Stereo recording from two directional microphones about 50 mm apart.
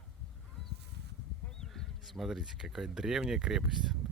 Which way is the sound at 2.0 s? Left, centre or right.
Centre.